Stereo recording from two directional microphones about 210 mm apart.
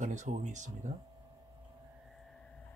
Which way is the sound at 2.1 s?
Centre (ahead or behind).